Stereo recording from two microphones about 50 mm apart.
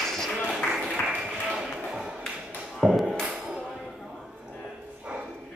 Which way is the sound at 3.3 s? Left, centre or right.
Centre.